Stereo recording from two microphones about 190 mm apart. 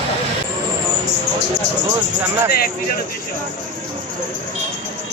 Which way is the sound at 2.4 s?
50° left (ahead or behind).